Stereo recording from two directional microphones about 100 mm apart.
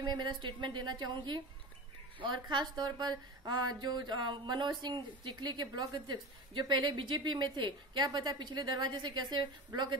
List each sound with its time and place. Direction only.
0.0 s speech: 50° right (ahead or behind)